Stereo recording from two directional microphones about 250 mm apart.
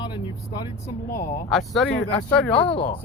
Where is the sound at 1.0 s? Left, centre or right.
Left.